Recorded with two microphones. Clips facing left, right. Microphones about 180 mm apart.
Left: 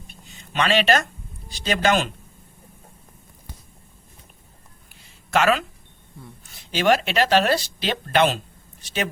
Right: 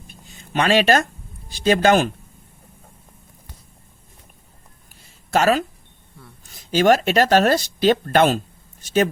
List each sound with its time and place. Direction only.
0.3 s speech: 45° right (ahead or behind)
4.9 s a sound: 40° right (ahead or behind)
6.5 s speech: 40° right (ahead or behind)